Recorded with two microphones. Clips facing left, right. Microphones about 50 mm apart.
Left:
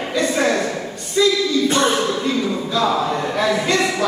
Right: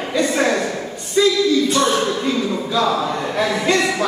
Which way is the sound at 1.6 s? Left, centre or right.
Left.